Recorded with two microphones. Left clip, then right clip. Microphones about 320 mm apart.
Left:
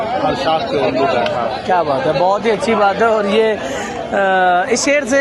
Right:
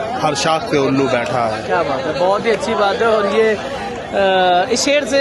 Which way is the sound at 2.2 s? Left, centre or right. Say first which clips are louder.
Left 1 dB; centre.